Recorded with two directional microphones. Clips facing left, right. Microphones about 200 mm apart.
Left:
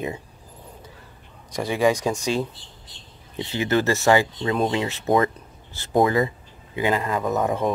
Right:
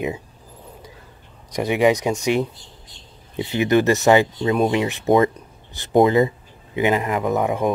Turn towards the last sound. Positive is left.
turn(degrees=-15)  # may be behind; listen again after turning